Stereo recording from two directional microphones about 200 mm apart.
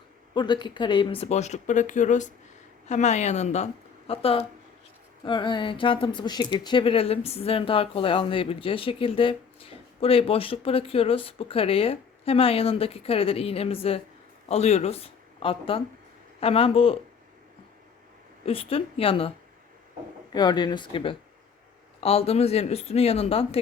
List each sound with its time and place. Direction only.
0.3 s a woman's voice: 20° left (ahead or behind)
18.4 s speech: 30° left (ahead or behind)
20.3 s speech: 20° left (ahead or behind)